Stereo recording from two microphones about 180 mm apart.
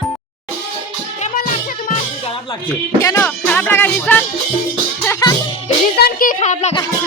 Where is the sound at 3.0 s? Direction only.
10° left (ahead or behind).